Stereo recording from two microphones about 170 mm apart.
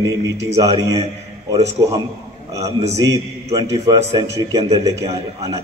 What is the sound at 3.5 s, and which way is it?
A man's voice, 20° right (ahead or behind).